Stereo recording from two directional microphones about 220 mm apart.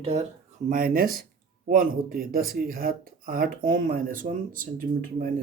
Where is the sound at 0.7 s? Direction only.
40° right (ahead or behind).